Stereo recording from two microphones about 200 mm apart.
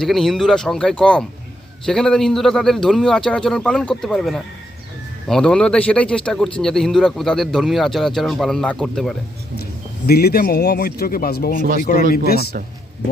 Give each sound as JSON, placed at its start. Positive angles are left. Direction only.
{"t": 0.0, "sound": "speech", "side_deg": 0}
{"t": 10.1, "sound": "speech", "side_deg": 50}